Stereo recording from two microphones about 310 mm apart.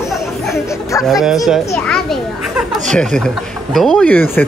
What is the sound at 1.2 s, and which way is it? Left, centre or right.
Speech, centre.